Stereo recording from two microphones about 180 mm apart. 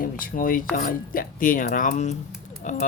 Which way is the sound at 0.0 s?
50° left (ahead or behind).